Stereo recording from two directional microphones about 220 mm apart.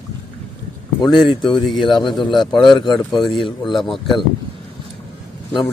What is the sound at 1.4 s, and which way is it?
Speech, 20° left (ahead or behind).